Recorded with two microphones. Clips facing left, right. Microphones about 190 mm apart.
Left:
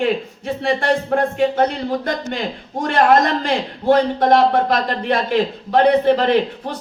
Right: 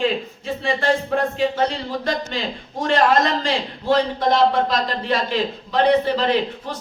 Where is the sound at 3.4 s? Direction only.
55° left (ahead or behind).